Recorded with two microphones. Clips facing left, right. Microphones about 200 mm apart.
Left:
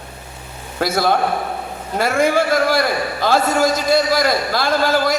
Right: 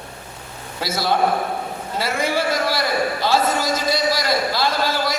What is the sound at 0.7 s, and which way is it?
A man's voice, 55° left (ahead or behind).